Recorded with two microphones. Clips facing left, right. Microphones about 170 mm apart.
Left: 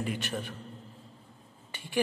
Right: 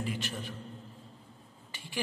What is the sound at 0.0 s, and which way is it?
Speech, 55° left (ahead or behind).